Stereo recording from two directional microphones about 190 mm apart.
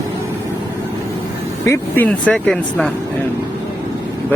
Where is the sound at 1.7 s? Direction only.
10° left (ahead or behind).